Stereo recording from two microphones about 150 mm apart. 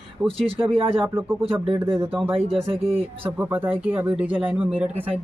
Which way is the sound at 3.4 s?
10° right (ahead or behind).